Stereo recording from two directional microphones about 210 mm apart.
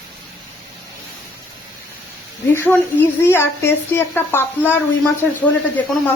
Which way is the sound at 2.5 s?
10° left (ahead or behind).